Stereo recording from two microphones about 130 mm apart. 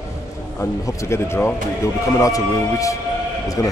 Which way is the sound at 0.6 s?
20° left (ahead or behind).